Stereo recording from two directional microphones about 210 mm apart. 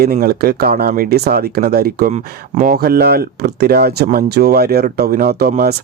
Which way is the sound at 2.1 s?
35° right (ahead or behind).